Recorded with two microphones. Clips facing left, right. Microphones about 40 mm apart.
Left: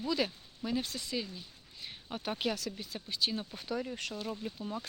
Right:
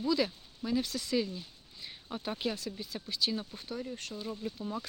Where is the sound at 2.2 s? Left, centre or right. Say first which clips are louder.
Left 1 dB; left.